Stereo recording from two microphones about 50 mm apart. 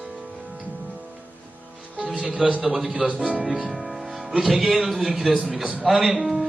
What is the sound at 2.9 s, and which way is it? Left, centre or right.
Speech, right.